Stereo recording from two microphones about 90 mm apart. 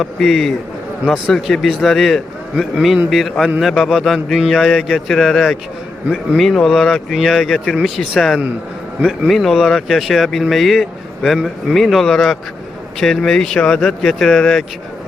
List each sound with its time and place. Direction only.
0.0 s speech: centre (ahead or behind)